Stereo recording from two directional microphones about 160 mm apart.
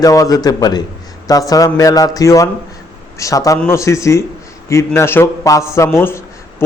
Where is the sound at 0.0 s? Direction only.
20° left (ahead or behind).